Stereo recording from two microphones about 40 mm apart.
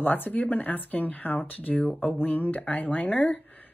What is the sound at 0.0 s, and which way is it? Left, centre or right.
Speech, left.